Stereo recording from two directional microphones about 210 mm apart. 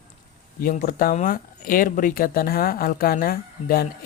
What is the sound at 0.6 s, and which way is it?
Speech, 40° left (ahead or behind).